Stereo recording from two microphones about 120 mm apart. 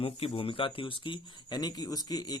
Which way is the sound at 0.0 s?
50° left (ahead or behind).